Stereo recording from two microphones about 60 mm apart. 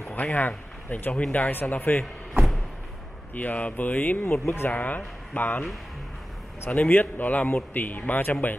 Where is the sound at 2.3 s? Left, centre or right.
Centre.